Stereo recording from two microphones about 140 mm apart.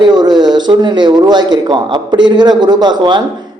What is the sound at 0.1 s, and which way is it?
A man's voice, 30° right (ahead or behind).